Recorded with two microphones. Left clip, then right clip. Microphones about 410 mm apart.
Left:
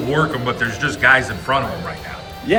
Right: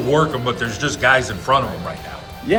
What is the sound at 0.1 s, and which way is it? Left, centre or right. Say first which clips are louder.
Speech: right 2 dB; centre.